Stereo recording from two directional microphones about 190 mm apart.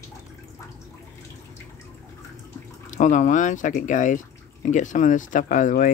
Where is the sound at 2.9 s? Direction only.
40° left (ahead or behind).